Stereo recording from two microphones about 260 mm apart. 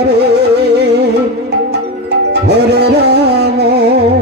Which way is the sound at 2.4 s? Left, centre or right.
Right.